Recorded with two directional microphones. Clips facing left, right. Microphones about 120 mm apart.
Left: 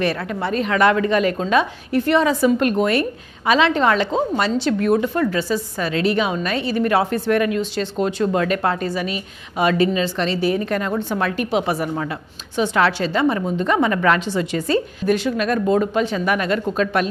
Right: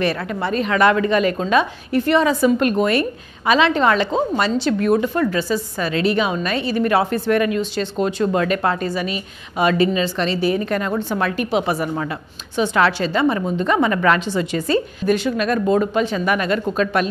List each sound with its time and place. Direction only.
0.0 s a woman's voice: 20° right (ahead or behind)